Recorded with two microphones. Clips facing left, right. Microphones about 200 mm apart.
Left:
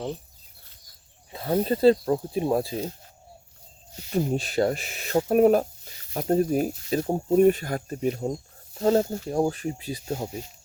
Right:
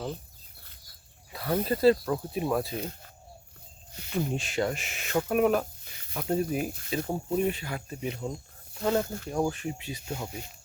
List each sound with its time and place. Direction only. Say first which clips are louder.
1.3 s speech: left 4 dB; 25° left (ahead or behind)
4.1 s speech: left 5 dB; 35° left (ahead or behind)